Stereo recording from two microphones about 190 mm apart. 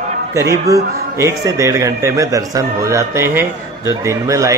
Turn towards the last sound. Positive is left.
turn(degrees=-15)  # may be behind; listen again after turning